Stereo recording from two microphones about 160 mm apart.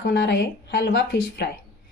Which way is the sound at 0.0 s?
90° left.